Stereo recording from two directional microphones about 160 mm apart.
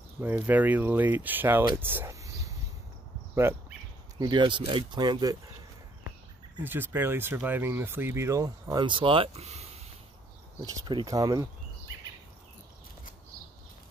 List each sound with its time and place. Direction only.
0.2 s speech: 10° right (ahead or behind)
4.2 s speech: 30° right (ahead or behind)
6.6 s speech: 10° right (ahead or behind); by 9.8 s 40° right (ahead or behind)
10.6 s speech: 25° right (ahead or behind)